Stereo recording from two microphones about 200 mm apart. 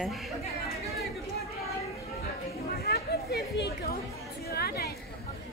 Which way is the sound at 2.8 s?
50° left (ahead or behind).